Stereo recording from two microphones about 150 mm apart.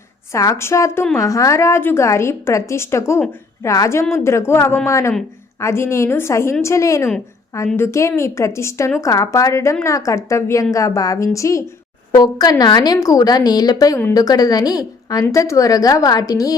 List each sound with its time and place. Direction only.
0.3 s a woman's voice: 20° left (ahead or behind)